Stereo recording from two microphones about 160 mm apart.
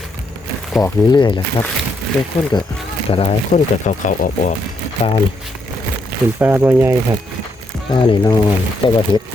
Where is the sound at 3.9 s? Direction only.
50° left (ahead or behind).